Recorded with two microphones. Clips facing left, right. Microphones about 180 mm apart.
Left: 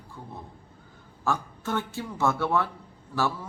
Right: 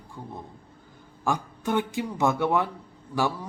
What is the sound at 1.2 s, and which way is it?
Speech, 15° right (ahead or behind).